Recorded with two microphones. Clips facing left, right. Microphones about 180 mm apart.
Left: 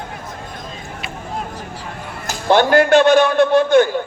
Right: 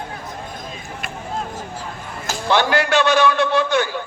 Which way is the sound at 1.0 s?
50° right (ahead or behind).